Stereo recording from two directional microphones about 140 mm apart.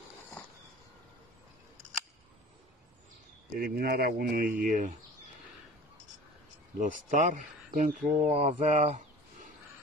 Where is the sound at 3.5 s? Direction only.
90° right; by 4.9 s 70° right (ahead or behind).